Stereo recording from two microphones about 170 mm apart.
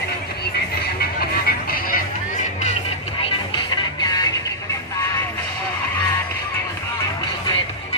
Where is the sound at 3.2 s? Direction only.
30° left (ahead or behind).